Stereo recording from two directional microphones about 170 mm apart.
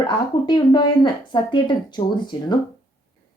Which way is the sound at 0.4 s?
25° left (ahead or behind).